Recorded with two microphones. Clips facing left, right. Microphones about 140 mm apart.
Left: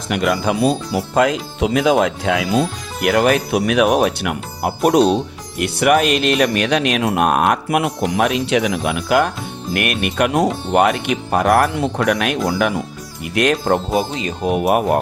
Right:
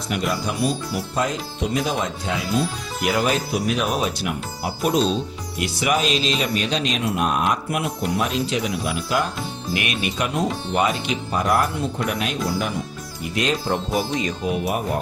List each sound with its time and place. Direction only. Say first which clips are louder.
0.1 s speech: left 7 dB; 90° left
3.0 s speech: left 6 dB; 60° left (ahead or behind)
10.7 s speech: left 6 dB; 60° left (ahead or behind); by 12.7 s 75° left (ahead or behind)
13.2 s speech: left 6 dB; 65° left (ahead or behind)
13.9 s speech: left 3 dB; 25° left (ahead or behind)
14.4 s speech: left 12 dB; 60° left (ahead or behind)